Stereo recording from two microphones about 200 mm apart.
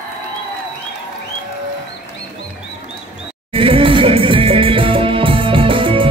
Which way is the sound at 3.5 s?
25° right (ahead or behind).